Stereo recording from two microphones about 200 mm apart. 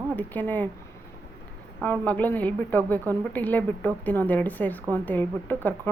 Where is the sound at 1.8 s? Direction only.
10° left (ahead or behind).